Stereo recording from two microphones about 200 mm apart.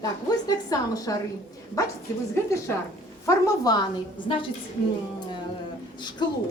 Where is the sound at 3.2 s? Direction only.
20° left (ahead or behind).